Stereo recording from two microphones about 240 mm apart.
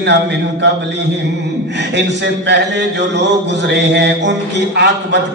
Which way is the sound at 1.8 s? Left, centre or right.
Right.